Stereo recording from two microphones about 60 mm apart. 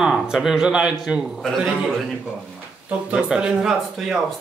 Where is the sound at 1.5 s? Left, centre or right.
Centre.